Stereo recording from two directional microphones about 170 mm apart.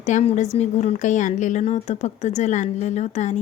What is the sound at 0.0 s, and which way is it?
A woman's voice, 45° left (ahead or behind).